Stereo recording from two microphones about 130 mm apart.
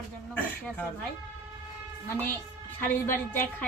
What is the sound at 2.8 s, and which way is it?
Speech, 15° left (ahead or behind).